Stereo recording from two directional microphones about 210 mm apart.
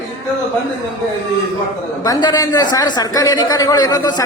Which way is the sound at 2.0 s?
20° left (ahead or behind).